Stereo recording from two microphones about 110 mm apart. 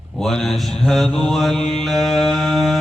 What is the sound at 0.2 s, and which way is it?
Mantra, 5° left (ahead or behind).